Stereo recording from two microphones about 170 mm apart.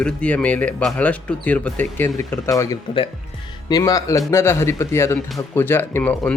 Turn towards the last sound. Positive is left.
turn(degrees=10)  # may be behind; listen again after turning